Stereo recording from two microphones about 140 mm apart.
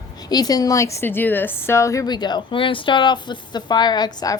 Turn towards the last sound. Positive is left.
turn(degrees=30)  # may be behind; listen again after turning